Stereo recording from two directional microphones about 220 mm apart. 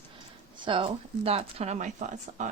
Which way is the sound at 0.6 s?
20° right (ahead or behind).